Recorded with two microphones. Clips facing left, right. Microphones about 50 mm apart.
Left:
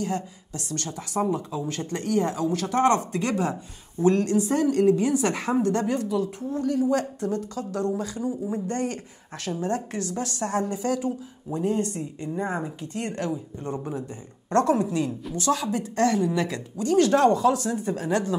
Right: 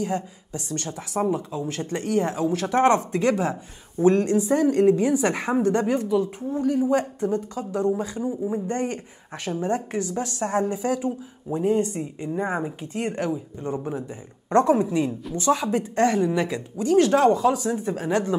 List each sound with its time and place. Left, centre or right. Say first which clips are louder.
0.0 s a woman's voice: right 2 dB; centre